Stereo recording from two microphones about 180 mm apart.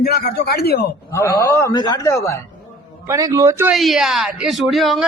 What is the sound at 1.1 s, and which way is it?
A man's voice, 15° left (ahead or behind).